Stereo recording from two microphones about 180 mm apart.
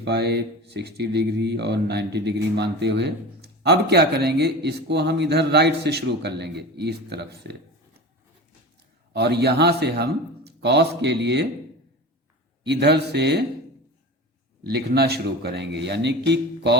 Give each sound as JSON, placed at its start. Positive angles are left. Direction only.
{"t": 0.0, "sound": "speech", "side_deg": -65}
{"t": 9.1, "sound": "speech", "side_deg": -65}
{"t": 12.6, "sound": "speech", "side_deg": -70}
{"t": 14.7, "sound": "speech", "side_deg": -65}